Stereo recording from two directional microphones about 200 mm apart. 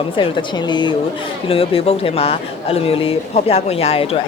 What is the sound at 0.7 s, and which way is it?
A woman's voice, 25° left (ahead or behind).